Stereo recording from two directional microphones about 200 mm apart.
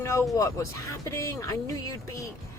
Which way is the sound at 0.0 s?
15° left (ahead or behind).